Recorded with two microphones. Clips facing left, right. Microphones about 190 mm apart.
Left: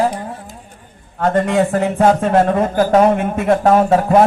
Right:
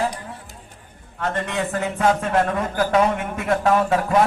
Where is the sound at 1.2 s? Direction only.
35° left (ahead or behind).